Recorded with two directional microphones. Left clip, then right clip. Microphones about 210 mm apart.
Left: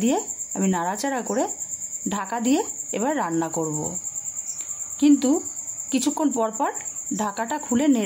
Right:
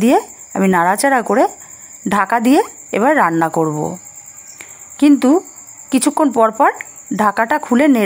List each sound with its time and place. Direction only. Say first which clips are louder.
0.0 s speech: right 11 dB; 25° right (ahead or behind)
4.9 s speech: right 8 dB; 20° right (ahead or behind)